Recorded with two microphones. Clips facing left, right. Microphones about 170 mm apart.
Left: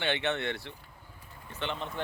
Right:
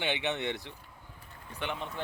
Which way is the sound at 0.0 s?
15° right (ahead or behind).